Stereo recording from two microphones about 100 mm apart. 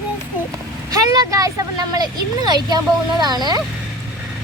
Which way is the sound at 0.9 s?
35° right (ahead or behind).